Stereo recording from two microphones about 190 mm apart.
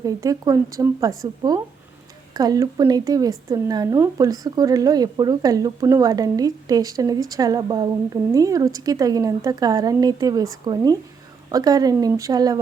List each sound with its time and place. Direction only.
0.0 s speech: 20° right (ahead or behind)